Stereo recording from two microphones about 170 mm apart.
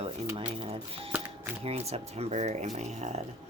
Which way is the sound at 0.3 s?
35° right (ahead or behind).